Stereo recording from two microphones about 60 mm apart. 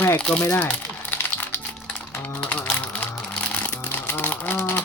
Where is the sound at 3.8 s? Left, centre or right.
Left.